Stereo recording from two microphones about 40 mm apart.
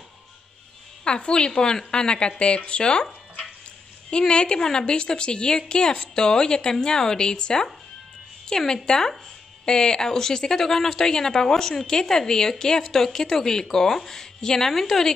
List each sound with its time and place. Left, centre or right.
1.0 s a woman's voice: left
4.1 s a woman's voice: left; by 15.1 s centre